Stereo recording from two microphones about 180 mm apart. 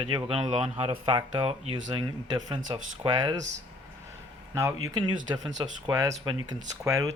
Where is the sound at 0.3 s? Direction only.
30° right (ahead or behind).